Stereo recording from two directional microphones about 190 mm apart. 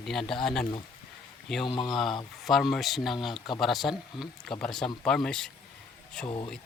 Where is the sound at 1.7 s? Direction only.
20° left (ahead or behind).